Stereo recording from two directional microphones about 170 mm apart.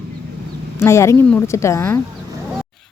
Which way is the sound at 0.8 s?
15° left (ahead or behind).